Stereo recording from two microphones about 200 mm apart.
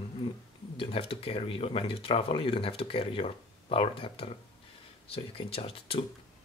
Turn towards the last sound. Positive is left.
turn(degrees=25)  # may be behind; listen again after turning